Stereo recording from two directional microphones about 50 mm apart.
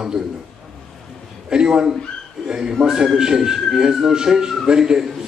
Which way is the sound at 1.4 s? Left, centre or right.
Centre.